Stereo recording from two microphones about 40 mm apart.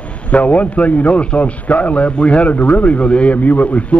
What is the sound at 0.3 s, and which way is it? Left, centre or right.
A man's voice, left.